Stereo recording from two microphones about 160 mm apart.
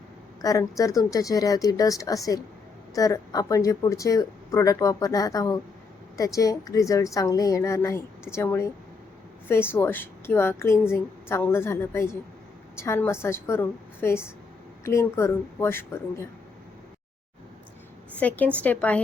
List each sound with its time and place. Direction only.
0.4 s a woman's voice: 20° left (ahead or behind)
18.2 s a woman's voice: 10° left (ahead or behind)